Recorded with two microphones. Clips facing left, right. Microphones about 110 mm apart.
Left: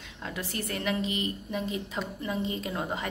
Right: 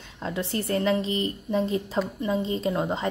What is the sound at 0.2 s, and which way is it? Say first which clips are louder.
A woman's voice: right 6 dB; 30° right (ahead or behind).